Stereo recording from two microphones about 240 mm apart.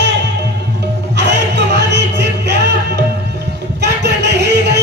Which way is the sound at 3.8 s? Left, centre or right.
Right.